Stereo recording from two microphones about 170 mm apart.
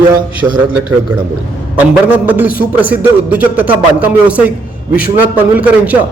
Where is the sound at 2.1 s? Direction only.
10° right (ahead or behind).